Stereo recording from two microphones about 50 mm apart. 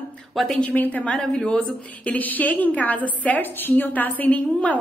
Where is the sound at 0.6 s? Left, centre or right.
Left.